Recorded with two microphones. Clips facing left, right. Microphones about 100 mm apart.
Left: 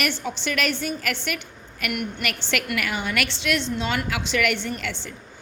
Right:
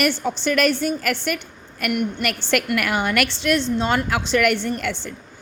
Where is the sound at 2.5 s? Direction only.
50° right (ahead or behind).